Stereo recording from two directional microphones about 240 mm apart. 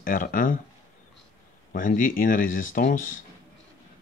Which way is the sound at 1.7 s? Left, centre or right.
Left.